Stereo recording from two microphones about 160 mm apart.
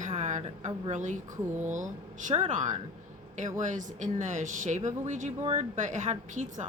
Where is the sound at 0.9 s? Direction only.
50° right (ahead or behind).